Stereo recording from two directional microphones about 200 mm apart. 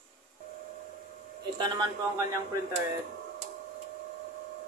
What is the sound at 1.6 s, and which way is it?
Speech, 20° right (ahead or behind).